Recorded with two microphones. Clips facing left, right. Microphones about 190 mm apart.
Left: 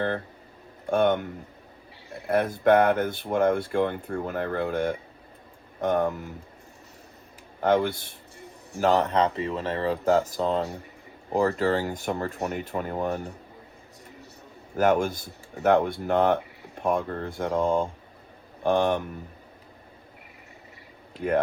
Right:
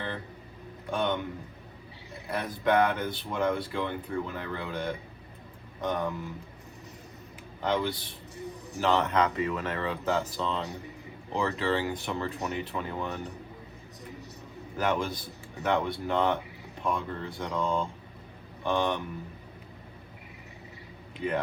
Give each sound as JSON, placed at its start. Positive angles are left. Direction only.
{"t": 0.9, "sound": "speech", "side_deg": 50}
{"t": 7.6, "sound": "speech", "side_deg": 50}
{"t": 8.8, "sound": "speech", "side_deg": 35}
{"t": 10.2, "sound": "speech", "side_deg": 50}
{"t": 14.8, "sound": "speech", "side_deg": 50}
{"t": 21.2, "sound": "speech", "side_deg": 55}